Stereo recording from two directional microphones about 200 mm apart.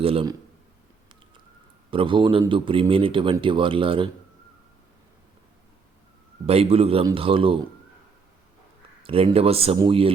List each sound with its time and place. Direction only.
0.0 s speech: 30° right (ahead or behind)
1.9 s speech: 25° right (ahead or behind)
6.4 s speech: 30° right (ahead or behind)
9.0 s speech: 30° right (ahead or behind)